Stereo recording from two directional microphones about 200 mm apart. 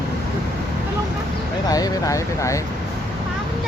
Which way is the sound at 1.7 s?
20° left (ahead or behind).